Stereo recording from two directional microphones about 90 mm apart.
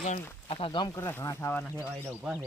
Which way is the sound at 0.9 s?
35° left (ahead or behind).